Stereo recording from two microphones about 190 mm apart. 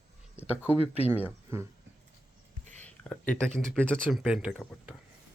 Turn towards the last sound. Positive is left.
turn(degrees=-5)  # may be behind; listen again after turning